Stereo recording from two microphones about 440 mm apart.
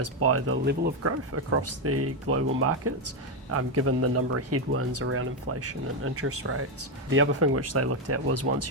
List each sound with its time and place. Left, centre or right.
0.0 s speech: right